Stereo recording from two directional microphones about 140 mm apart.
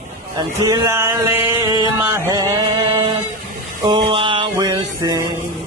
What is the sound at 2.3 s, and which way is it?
Chant, 25° right (ahead or behind).